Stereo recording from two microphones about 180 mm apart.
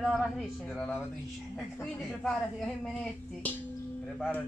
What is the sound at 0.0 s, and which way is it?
Speech, centre (ahead or behind).